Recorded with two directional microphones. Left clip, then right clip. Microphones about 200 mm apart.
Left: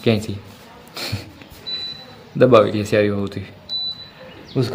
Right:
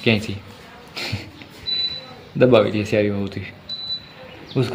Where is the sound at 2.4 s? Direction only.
15° left (ahead or behind).